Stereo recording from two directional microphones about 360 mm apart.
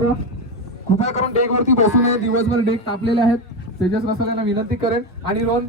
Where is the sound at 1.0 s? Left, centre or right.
Centre.